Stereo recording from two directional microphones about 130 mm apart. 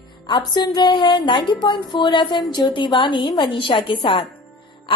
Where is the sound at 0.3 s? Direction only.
35° left (ahead or behind).